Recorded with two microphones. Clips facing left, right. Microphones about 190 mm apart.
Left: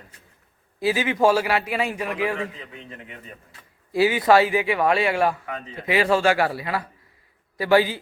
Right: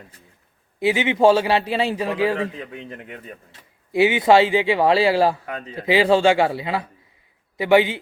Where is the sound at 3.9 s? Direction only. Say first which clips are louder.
Right 2 dB; 20° right (ahead or behind).